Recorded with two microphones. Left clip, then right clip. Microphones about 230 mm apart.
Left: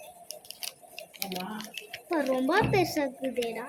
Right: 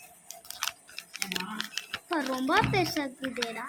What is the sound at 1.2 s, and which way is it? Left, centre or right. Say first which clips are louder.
Speech: right 3 dB; centre.